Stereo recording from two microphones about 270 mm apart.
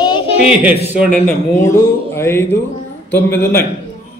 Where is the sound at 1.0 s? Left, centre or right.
Centre.